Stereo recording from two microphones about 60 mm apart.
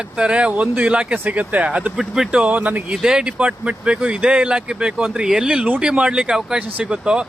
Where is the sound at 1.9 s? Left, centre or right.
Centre; by 3.0 s right.